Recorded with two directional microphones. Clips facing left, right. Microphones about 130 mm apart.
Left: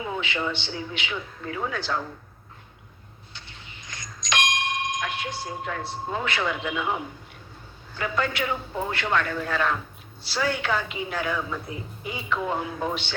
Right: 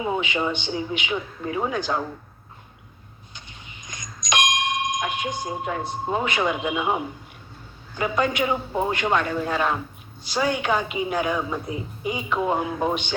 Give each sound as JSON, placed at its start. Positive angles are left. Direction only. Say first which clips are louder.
{"t": 0.0, "sound": "a woman's voice", "louder": "right 4 dB", "side_deg": -20}
{"t": 3.3, "sound": "doorbell", "louder": "right 1 dB", "side_deg": -15}
{"t": 7.9, "sound": "a woman's voice", "louder": "right 4 dB", "side_deg": -20}